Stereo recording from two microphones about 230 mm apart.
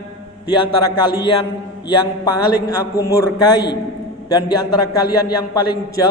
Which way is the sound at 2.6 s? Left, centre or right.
Centre.